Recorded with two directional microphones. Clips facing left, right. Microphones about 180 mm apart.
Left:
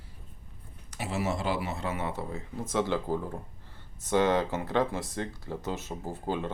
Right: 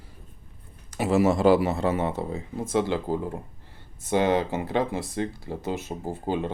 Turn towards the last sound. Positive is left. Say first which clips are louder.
# right 4 dB
turn(degrees=-15)  # may be behind; listen again after turning